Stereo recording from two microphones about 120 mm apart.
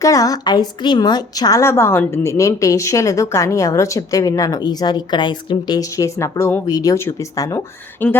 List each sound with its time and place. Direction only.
0.0 s a woman's voice: 30° left (ahead or behind)
6.1 s a woman's voice: 25° left (ahead or behind)
8.0 s speech: 15° left (ahead or behind)